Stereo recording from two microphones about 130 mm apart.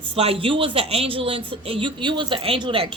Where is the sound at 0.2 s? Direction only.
50° right (ahead or behind).